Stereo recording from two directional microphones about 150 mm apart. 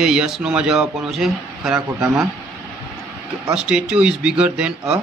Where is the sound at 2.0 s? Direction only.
20° right (ahead or behind).